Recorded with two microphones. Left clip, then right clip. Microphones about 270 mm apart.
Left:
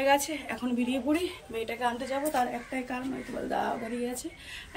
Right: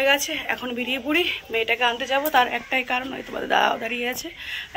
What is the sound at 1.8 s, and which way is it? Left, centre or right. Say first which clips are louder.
A woman's voice: right 8 dB; centre.